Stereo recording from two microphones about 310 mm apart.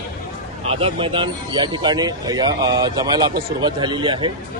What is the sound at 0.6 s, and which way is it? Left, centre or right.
A man's voice, centre.